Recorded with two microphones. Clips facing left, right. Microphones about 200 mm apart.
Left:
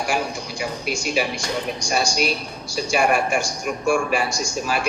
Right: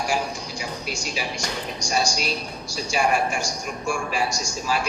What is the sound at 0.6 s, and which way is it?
A man's voice, 60° left (ahead or behind).